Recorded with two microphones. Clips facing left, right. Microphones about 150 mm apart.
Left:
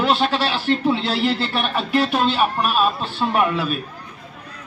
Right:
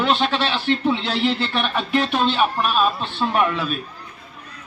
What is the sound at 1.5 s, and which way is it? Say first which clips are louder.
A man's voice: left 1 dB; 5° left (ahead or behind).